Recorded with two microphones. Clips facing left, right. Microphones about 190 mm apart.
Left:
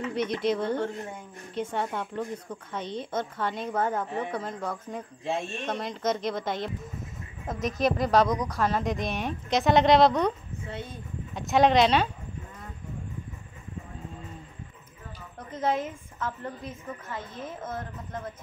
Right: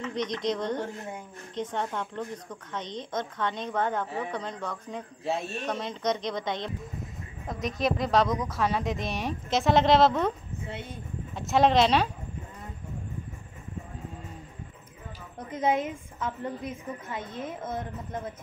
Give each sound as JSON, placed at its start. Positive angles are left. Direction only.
{"t": 0.0, "sound": "a woman's voice", "side_deg": 10}
{"t": 11.3, "sound": "a woman's voice", "side_deg": 0}
{"t": 15.3, "sound": "a woman's voice", "side_deg": -20}